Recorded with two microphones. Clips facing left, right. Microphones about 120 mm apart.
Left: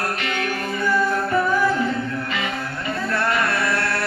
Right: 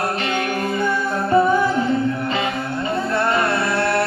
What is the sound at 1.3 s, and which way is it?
Music, 25° right (ahead or behind).